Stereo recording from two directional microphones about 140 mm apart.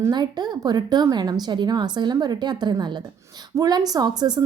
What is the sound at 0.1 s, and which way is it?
A woman's voice, 30° right (ahead or behind).